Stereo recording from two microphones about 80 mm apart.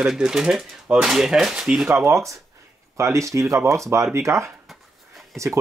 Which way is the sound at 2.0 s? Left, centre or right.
Right.